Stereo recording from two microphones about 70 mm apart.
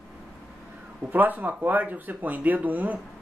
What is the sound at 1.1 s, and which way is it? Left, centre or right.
Speech, right.